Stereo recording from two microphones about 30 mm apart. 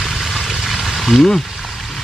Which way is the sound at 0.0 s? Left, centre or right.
Centre.